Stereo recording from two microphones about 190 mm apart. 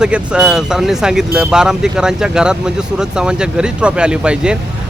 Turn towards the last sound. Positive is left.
turn(degrees=-5)  # may be behind; listen again after turning